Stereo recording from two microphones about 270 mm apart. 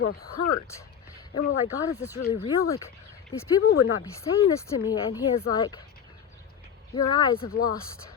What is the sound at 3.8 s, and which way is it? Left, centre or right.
Speech, left.